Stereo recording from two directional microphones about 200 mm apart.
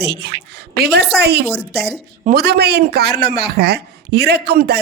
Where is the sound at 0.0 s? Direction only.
55° right (ahead or behind).